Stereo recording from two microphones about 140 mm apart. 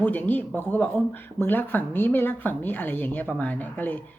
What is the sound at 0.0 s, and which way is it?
Speech, 15° left (ahead or behind).